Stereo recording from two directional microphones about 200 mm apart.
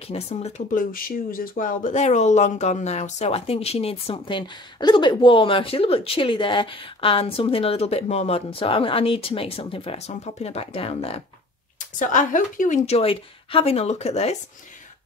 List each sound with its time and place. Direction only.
0.1 s a woman's voice: 30° left (ahead or behind)